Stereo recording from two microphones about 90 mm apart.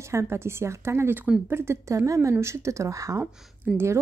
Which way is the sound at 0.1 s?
30° right (ahead or behind).